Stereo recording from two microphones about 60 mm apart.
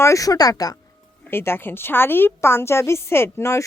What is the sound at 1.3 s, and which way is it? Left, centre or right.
Speech, left.